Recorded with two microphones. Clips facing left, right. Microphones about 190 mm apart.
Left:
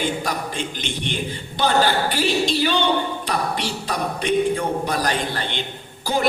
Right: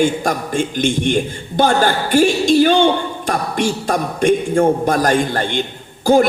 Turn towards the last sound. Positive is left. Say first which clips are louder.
# right 11 dB
turn(degrees=-45)  # may be behind; listen again after turning